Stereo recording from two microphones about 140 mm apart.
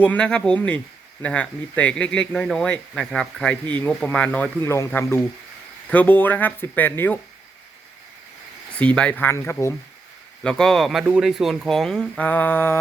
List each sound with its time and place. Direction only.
0.0 s speech: 10° left (ahead or behind)
4.6 s speech: 20° left (ahead or behind)
8.8 s speech: 10° left (ahead or behind)
10.4 s speech: 5° left (ahead or behind)